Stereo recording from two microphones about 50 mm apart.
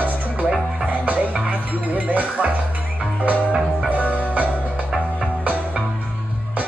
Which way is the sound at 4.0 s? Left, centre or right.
Left.